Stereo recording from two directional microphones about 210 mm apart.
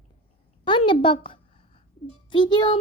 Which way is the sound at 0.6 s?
25° left (ahead or behind).